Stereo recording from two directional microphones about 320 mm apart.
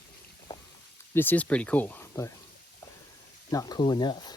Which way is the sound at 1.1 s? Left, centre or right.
Centre.